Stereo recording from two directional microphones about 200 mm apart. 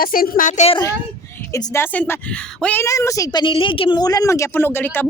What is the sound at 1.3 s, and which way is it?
A woman's voice, 15° left (ahead or behind).